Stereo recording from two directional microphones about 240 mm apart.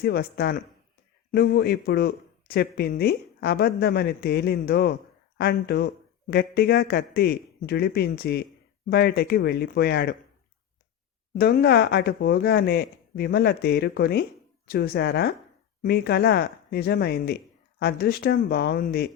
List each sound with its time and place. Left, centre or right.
0.0 s a man's voice: left
11.3 s a man's voice: left